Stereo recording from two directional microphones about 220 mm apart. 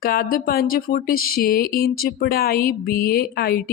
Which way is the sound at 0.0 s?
40° left (ahead or behind).